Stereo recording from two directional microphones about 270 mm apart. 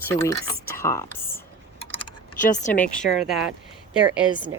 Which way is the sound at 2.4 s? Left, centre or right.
Left.